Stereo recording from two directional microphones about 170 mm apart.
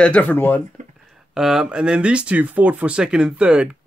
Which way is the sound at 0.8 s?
45° right (ahead or behind).